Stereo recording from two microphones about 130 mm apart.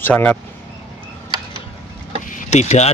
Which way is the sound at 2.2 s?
70° left (ahead or behind).